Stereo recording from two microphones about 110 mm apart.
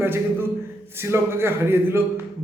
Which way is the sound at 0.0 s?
20° right (ahead or behind).